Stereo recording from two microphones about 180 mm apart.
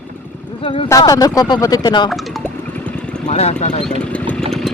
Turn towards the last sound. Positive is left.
turn(degrees=35)  # may be behind; listen again after turning